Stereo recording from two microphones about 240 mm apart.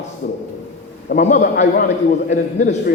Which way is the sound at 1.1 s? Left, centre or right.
Left.